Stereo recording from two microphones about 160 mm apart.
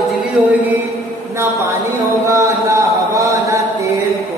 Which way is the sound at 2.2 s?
20° right (ahead or behind).